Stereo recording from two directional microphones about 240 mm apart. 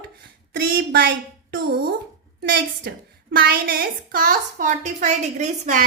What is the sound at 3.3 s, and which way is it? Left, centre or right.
A woman's voice, right.